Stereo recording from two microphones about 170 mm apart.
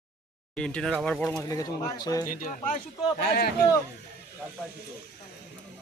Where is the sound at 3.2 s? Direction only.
65° left (ahead or behind).